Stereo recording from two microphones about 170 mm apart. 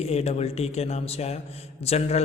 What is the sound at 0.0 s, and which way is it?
A man's voice, 40° left (ahead or behind).